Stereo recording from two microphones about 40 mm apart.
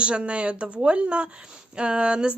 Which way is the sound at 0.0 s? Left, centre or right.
Right.